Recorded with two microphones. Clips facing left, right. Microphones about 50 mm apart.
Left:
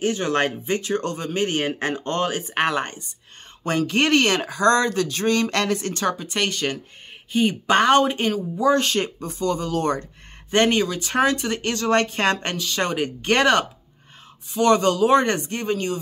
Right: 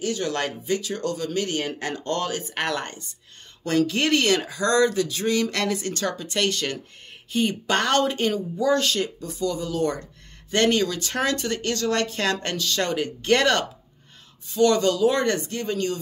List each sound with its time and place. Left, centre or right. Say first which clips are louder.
0.0 s speech: left 4 dB; left
5.9 s speech: left 4 dB; left
6.3 s speech: left 1 dB; centre; by 10.0 s left
10.5 s speech: left 2 dB; left
14.5 s speech: left 2 dB; left